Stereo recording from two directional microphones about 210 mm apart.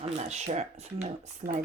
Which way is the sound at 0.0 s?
30° right (ahead or behind).